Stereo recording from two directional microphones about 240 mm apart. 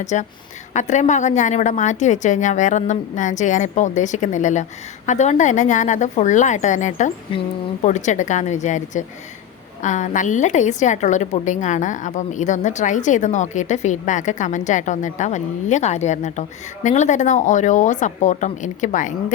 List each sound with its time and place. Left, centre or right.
0.0 s a woman's voice: left